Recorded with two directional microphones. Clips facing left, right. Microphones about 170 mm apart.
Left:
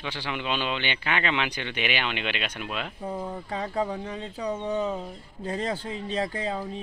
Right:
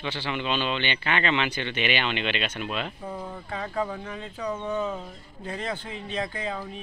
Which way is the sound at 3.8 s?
20° left (ahead or behind).